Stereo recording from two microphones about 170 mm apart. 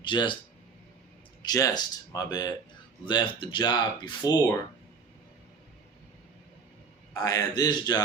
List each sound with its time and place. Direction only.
0.0 s speech: 30° left (ahead or behind)
1.4 s speech: 20° left (ahead or behind)
7.1 s speech: 20° left (ahead or behind)